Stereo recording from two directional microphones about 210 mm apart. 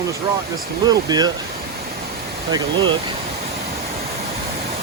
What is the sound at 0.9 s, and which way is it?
Speech, 20° right (ahead or behind).